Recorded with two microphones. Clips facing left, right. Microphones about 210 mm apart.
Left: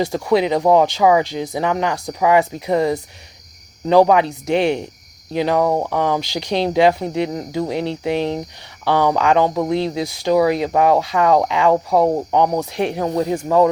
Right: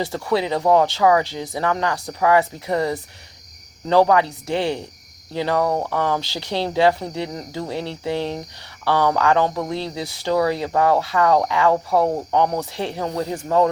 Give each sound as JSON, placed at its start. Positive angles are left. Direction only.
{"t": 0.0, "sound": "speech", "side_deg": 15}